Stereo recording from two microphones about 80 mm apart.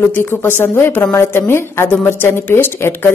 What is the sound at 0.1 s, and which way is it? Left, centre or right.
A woman's voice, left.